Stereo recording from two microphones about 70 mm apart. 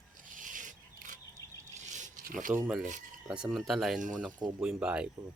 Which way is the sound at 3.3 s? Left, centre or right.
Centre.